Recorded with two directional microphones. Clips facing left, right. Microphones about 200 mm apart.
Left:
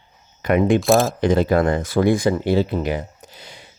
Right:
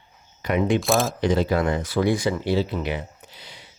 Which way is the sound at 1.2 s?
50° left (ahead or behind).